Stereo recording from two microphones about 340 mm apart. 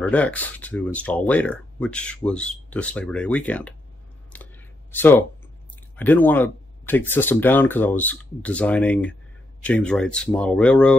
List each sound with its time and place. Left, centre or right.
0.0 s speech: centre
4.3 s a sound: centre
5.9 s speech: centre